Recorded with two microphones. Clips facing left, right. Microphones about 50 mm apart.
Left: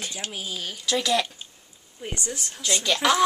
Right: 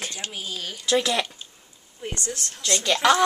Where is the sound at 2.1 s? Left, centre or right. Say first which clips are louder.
Even; centre.